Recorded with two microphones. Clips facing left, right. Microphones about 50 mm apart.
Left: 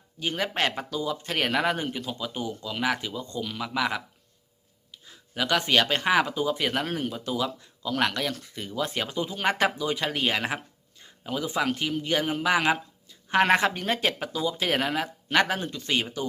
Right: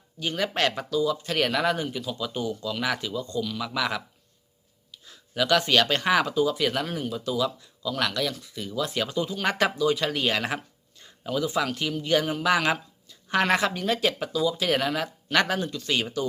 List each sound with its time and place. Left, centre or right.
0.2 s speech: left
2.1 s speech: left
3.8 s a man's voice: centre
6.8 s speech: left
9.0 s speech: left